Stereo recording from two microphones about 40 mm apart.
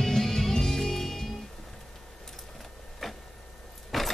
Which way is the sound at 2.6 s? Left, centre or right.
Centre.